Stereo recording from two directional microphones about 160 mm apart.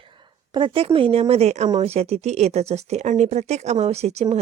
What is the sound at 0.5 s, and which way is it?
Speech, 35° right (ahead or behind).